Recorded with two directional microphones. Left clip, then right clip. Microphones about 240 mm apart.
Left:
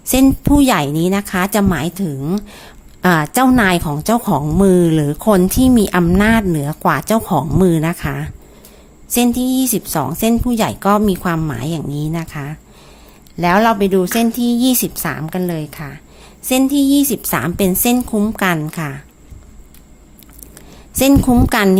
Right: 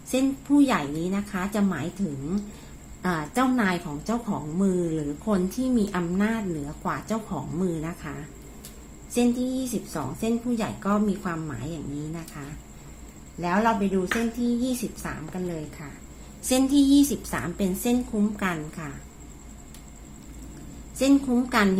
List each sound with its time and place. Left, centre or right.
0.1 s a woman's voice: left
3.0 s a woman's voice: left
9.9 s a woman's voice: left
16.5 s a woman's voice: left
21.0 s a woman's voice: left